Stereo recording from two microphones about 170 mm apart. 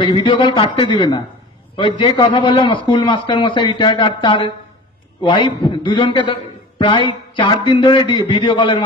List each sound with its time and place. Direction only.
0.0 s a man's voice: 30° left (ahead or behind)